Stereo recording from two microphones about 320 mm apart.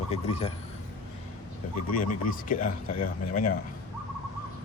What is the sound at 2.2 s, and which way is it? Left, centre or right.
A man's voice, left.